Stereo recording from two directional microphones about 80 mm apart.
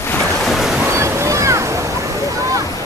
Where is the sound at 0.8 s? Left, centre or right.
Right.